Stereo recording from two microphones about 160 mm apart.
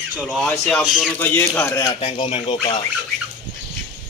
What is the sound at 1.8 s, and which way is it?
Speech, 35° left (ahead or behind).